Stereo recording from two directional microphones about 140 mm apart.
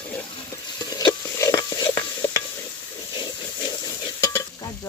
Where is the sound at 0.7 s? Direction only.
25° left (ahead or behind).